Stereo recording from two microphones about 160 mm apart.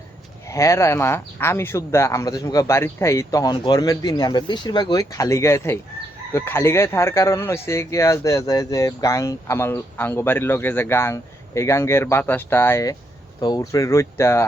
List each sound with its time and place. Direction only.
0.4 s speech: 20° left (ahead or behind)